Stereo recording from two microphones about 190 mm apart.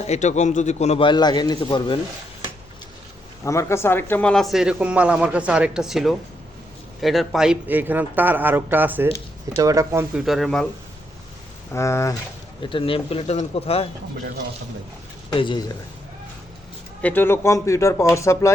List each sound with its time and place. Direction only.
0.1 s a man's voice: 40° left (ahead or behind)
3.4 s a man's voice: 15° left (ahead or behind); by 10.2 s 10° right (ahead or behind)
10.2 s a man's voice: centre (ahead or behind)
11.7 s speech: 15° left (ahead or behind)
12.6 s a man's voice: 30° left (ahead or behind)
15.3 s speech: 25° left (ahead or behind)
17.0 s speech: 10° left (ahead or behind)